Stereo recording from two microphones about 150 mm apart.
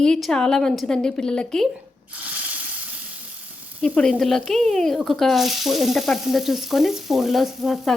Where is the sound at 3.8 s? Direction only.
5° left (ahead or behind).